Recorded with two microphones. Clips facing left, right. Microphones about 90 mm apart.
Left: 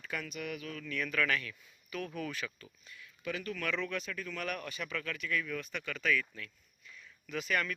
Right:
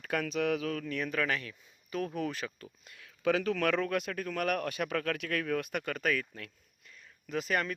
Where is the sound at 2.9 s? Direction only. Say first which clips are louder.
Right 10 dB; 90° right.